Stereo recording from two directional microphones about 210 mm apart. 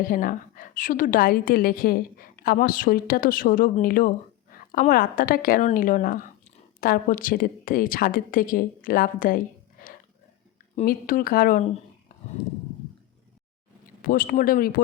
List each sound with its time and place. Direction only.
0.0 s a woman's voice: 40° left (ahead or behind)
10.8 s a woman's voice: 40° left (ahead or behind)
14.0 s a woman's voice: 45° left (ahead or behind)